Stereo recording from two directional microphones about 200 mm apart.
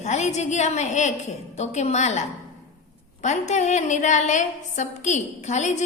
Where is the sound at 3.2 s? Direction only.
35° left (ahead or behind).